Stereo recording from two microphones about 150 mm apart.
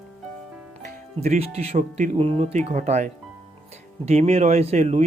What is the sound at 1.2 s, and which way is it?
Speech, 45° right (ahead or behind).